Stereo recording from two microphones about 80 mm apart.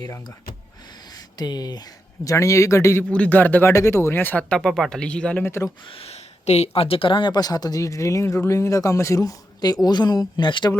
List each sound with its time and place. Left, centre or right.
1.4 s speech: left
2.2 s a man's voice: left
3.0 s a man's voice: centre
3.7 s speech: left; by 5.4 s centre
5.5 s a man's voice: left
7.0 s speech: left